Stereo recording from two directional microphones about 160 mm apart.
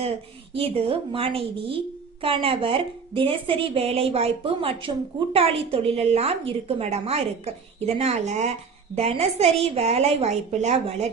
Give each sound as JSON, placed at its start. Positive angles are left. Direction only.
{"t": 0.5, "sound": "a woman's voice", "side_deg": -35}